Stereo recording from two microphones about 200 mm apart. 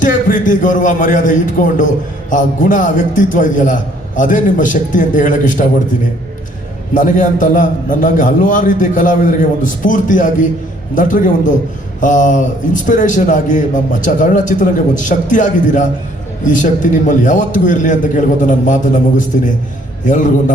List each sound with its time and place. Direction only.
0.0 s a man's voice: 40° left (ahead or behind)
6.9 s a man's voice: 40° left (ahead or behind)